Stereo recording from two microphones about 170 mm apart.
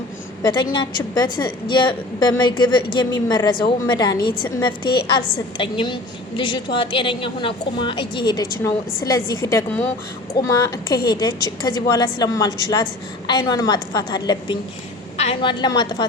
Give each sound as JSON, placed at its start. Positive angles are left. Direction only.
{"t": 0.4, "sound": "a woman's voice", "side_deg": 25}